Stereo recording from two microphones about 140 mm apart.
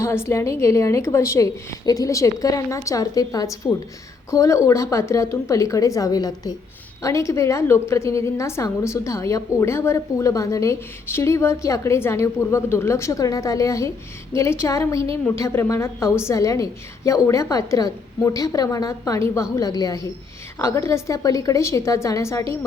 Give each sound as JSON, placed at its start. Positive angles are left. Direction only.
{"t": 0.0, "sound": "a woman's voice", "side_deg": 20}